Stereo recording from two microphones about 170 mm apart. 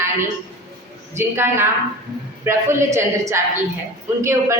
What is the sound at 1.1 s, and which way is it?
A woman's voice, 15° right (ahead or behind).